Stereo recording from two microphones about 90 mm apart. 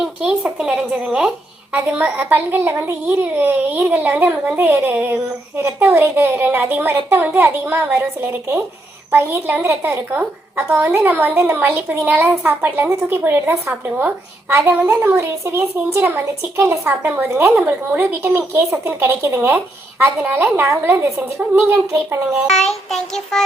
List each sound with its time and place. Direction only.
0.0 s a child's voice: 5° right (ahead or behind); by 13.7 s 25° right (ahead or behind)
13.8 s speech: 15° right (ahead or behind)
14.5 s a child's voice: 30° right (ahead or behind)
22.4 s child singing: 5° left (ahead or behind)